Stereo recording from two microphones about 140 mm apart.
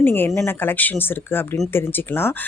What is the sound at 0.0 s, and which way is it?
Speech, 15° left (ahead or behind).